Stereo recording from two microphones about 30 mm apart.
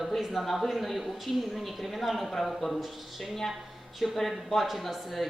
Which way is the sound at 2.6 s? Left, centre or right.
Centre.